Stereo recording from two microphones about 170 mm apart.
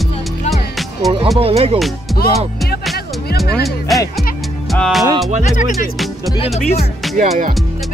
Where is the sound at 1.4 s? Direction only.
35° right (ahead or behind).